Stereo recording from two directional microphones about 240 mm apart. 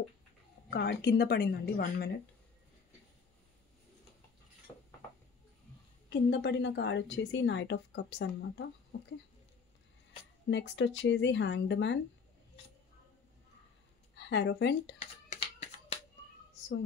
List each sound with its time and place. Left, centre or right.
0.7 s a woman's voice: left
4.7 s dishes: centre
6.0 s a woman's voice: left
10.5 s a woman's voice: left
14.1 s speech: left
15.0 s a sound: left